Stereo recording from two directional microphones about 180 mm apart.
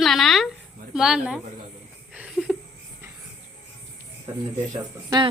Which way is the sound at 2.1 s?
5° right (ahead or behind).